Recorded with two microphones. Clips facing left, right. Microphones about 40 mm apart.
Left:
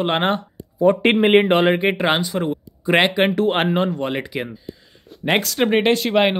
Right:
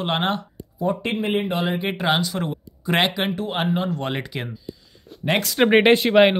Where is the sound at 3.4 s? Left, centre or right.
Left.